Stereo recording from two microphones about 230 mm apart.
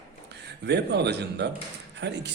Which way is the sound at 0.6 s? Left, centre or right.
Right.